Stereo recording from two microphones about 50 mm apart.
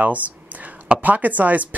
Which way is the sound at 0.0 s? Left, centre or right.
Right.